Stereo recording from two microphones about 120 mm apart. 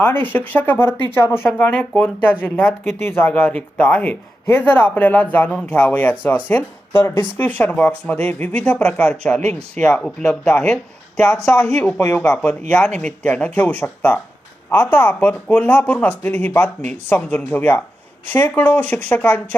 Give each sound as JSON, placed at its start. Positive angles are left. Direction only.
{"t": 0.0, "sound": "speech", "side_deg": 15}
{"t": 11.3, "sound": "speech", "side_deg": 30}
{"t": 12.3, "sound": "speech", "side_deg": 5}